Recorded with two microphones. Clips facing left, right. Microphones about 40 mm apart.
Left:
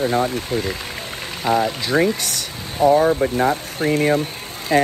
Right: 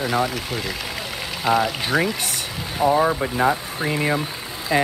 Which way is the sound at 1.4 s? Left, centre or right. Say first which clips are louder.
Left 1 dB; centre.